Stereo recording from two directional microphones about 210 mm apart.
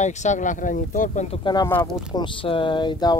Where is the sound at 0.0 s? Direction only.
35° left (ahead or behind).